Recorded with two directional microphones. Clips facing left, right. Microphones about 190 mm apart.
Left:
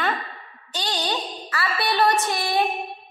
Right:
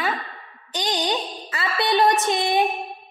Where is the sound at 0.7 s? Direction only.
15° right (ahead or behind).